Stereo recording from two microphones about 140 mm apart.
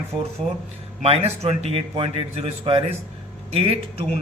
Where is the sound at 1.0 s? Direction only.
50° right (ahead or behind).